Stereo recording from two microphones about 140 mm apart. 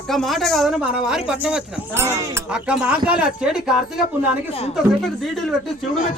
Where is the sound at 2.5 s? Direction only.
5° right (ahead or behind).